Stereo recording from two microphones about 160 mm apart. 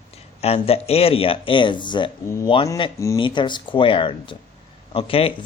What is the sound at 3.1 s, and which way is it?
Speech, 30° left (ahead or behind).